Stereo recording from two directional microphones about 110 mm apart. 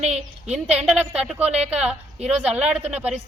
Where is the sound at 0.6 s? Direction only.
10° right (ahead or behind).